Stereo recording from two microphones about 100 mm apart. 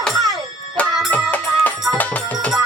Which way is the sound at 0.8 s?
15° left (ahead or behind).